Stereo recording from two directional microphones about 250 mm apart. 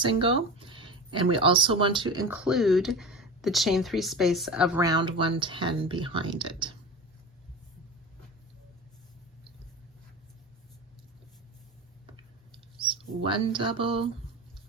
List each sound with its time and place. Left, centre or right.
0.0 s speech: right
2.2 s speech: centre
4.9 s speech: centre
12.1 s a sound: centre